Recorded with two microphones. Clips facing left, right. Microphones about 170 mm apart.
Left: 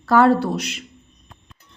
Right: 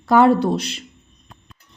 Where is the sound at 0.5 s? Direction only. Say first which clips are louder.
Right 1 dB; 30° right (ahead or behind).